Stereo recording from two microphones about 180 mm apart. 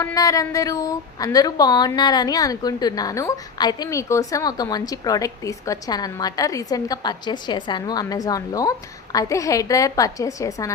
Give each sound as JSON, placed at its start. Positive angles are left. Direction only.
{"t": 0.0, "sound": "a woman's voice", "side_deg": 20}